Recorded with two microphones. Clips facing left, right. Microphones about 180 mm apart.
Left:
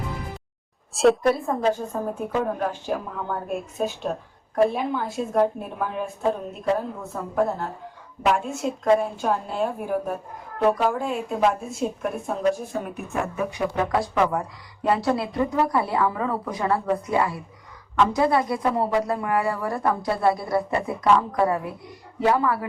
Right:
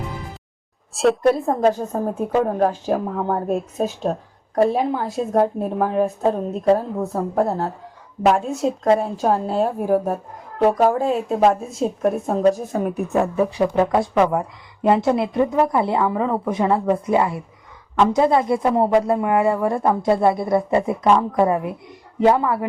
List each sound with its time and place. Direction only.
0.9 s a woman's voice: centre (ahead or behind)
1.5 s a woman's voice: 45° right (ahead or behind); by 22.6 s 20° right (ahead or behind)